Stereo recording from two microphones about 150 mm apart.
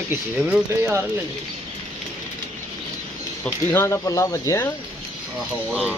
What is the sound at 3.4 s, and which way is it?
Speech, 15° left (ahead or behind).